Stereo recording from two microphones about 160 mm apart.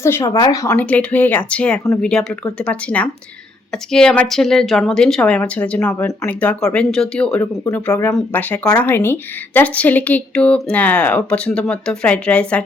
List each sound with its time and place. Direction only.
0.0 s speech: 15° left (ahead or behind)
0.3 s speech: 25° left (ahead or behind)
0.8 s speech: 10° left (ahead or behind)
7.6 s speech: 15° left (ahead or behind)